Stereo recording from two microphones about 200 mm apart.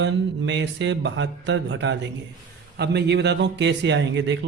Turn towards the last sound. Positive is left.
turn(degrees=-65)  # may be behind; listen again after turning